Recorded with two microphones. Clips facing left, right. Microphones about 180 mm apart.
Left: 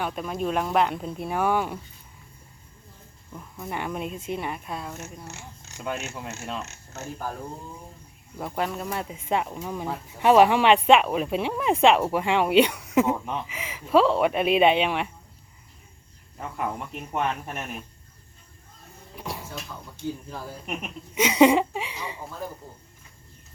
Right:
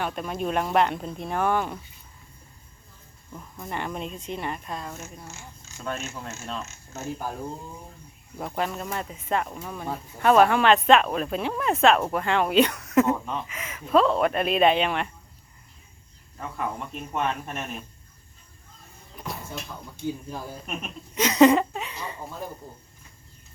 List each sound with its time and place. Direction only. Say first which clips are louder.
0.0 s speech: left 1 dB; centre (ahead or behind)
3.3 s speech: left 1 dB; 5° left (ahead or behind)
5.3 s speech: left 2 dB; 70° left (ahead or behind)
8.4 s speech: even; centre (ahead or behind)
16.4 s speech: left 1 dB; 15° left (ahead or behind)
19.1 s a sound: left 1 dB; 10° left (ahead or behind)
20.7 s speech: left 1 dB; 10° left (ahead or behind)
22.2 s speech: even; 15° right (ahead or behind)